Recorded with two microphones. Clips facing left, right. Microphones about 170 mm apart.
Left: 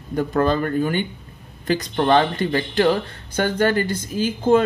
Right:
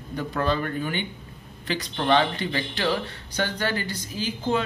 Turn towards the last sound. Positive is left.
turn(degrees=50)  # may be behind; listen again after turning